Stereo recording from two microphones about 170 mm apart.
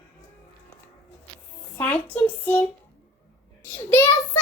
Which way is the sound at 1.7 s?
10° left (ahead or behind).